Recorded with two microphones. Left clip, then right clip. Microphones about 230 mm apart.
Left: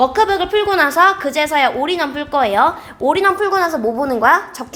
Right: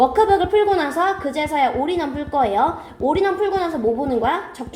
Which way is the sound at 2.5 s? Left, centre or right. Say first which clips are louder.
Left 5 dB; left.